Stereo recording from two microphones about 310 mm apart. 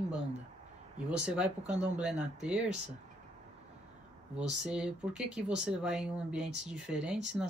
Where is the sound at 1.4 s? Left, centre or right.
Right.